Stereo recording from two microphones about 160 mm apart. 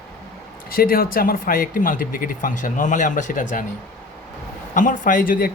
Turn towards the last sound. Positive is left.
turn(degrees=60)  # may be behind; listen again after turning